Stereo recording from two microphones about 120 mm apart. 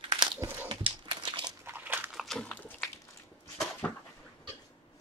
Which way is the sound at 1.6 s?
15° right (ahead or behind).